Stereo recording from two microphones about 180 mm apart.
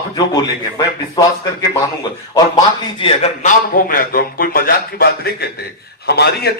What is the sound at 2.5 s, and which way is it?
Speech, 30° left (ahead or behind).